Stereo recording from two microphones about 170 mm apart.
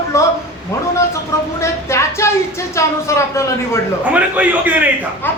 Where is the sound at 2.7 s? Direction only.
15° left (ahead or behind).